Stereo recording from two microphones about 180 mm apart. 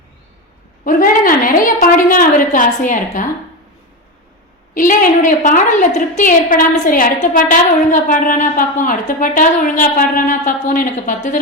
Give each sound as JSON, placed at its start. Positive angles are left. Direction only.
{"t": 0.9, "sound": "a woman's voice", "side_deg": 50}
{"t": 4.7, "sound": "a woman's voice", "side_deg": 50}